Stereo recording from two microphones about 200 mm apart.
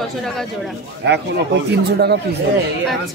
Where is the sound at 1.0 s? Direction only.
60° right (ahead or behind).